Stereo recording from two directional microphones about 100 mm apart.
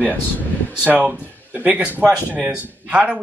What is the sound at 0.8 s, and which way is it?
Speech, 15° right (ahead or behind).